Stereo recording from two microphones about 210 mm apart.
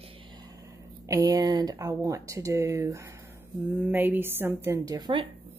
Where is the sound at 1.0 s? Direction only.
15° right (ahead or behind).